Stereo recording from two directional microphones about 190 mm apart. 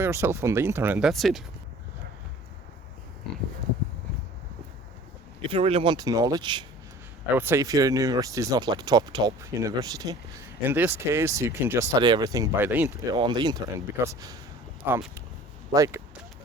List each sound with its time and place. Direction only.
0.0 s speech: 15° right (ahead or behind)
5.5 s speech: 30° right (ahead or behind)
7.3 s speech: 10° right (ahead or behind)
13.1 s speech: 25° right (ahead or behind)